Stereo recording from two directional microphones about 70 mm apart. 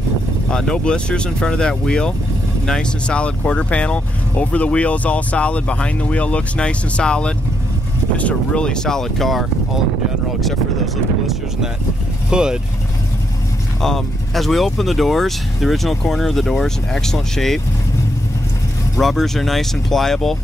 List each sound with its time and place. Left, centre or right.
0.5 s speech: centre
12.3 s speech: centre
13.7 s speech: centre
18.9 s speech: centre